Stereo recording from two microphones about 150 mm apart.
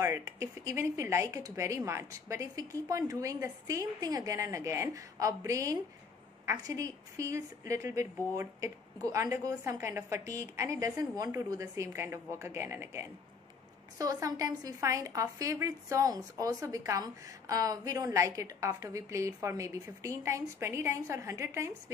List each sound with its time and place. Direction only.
0.0 s a woman's voice: 20° right (ahead or behind)